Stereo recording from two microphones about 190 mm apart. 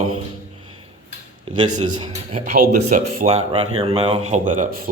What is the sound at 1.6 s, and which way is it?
Speech, 25° right (ahead or behind).